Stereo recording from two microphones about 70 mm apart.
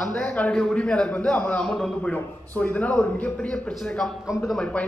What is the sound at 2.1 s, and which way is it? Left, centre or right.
Speech, left.